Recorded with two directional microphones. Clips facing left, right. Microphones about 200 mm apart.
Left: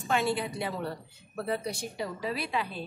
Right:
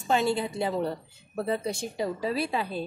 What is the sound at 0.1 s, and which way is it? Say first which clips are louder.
A woman's voice: right 3 dB; 30° right (ahead or behind).